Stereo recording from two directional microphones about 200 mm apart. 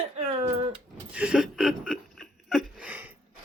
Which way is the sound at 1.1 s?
5° right (ahead or behind).